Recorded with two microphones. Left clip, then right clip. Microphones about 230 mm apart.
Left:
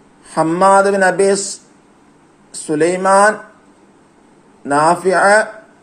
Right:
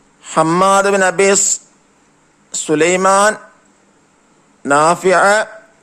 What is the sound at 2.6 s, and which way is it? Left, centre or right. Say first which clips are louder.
Speech: right 2 dB; right.